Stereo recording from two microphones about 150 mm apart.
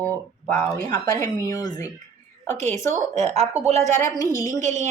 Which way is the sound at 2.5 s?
50° right (ahead or behind).